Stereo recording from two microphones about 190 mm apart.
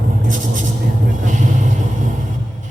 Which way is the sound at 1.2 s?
40° right (ahead or behind).